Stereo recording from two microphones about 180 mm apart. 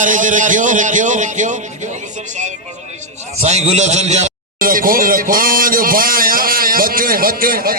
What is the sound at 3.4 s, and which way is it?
A man's voice, 35° right (ahead or behind).